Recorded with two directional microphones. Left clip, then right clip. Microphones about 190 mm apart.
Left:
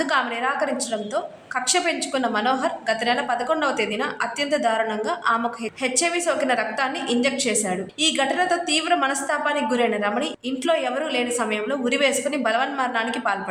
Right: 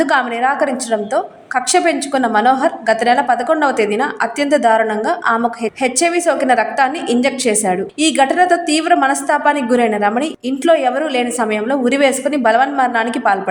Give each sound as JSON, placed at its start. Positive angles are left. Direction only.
{"t": 0.0, "sound": "a woman's voice", "side_deg": -25}